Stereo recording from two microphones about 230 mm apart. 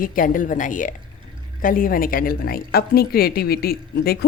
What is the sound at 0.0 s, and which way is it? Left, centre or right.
A woman's voice, left.